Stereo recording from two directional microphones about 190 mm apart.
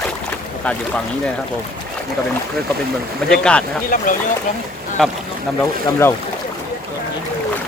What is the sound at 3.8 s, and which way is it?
Speech, 45° left (ahead or behind).